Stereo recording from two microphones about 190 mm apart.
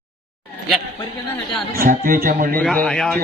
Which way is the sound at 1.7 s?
50° right (ahead or behind).